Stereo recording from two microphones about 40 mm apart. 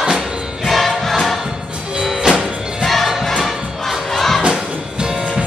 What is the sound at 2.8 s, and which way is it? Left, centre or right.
Music, centre.